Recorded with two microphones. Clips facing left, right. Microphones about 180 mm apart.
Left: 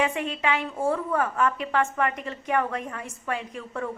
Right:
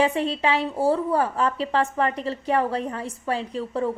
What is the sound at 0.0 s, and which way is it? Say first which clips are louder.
A woman's voice: right 4 dB; 30° right (ahead or behind).